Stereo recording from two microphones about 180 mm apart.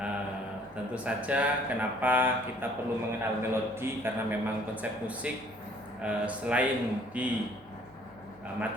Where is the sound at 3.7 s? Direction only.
15° right (ahead or behind).